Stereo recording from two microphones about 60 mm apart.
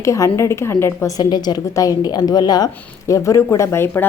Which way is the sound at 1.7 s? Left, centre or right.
Left.